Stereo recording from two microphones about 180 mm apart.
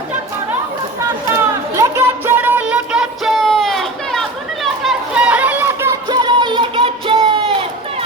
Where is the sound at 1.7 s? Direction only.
15° right (ahead or behind).